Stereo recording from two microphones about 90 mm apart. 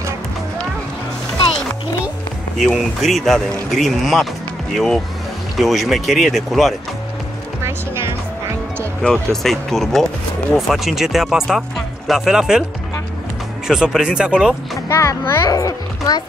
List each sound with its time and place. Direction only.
2.6 s speech: centre (ahead or behind)
7.6 s music: 30° right (ahead or behind)
9.0 s speech: 5° left (ahead or behind)
13.7 s speech: 5° right (ahead or behind)
14.9 s a child's voice: 35° left (ahead or behind)